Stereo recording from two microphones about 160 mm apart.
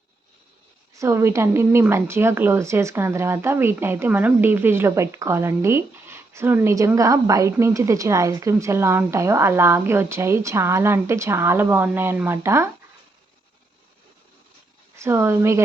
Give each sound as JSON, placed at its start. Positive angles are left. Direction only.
{"t": 0.9, "sound": "a woman's voice", "side_deg": -15}
{"t": 14.9, "sound": "a woman's voice", "side_deg": -15}